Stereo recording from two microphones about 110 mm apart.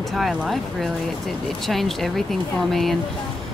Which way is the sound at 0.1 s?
Centre (ahead or behind).